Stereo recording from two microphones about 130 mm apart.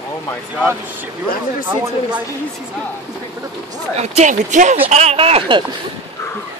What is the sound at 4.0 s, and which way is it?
Speech, 65° right (ahead or behind).